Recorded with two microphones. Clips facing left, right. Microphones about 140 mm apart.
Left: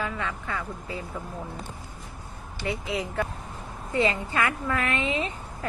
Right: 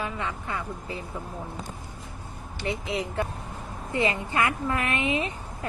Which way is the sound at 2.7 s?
25° right (ahead or behind).